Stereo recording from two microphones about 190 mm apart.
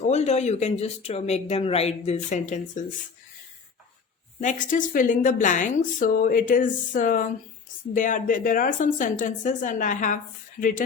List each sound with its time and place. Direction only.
0.0 s speech: 35° left (ahead or behind)
4.4 s a woman's voice: 40° left (ahead or behind)